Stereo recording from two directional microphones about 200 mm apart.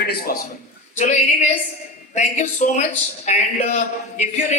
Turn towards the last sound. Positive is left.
turn(degrees=35)  # may be behind; listen again after turning